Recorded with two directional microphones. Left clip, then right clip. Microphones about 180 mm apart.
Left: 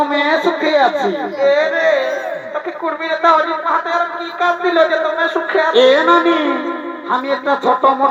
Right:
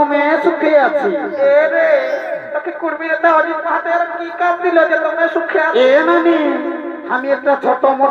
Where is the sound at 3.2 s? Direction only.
25° right (ahead or behind).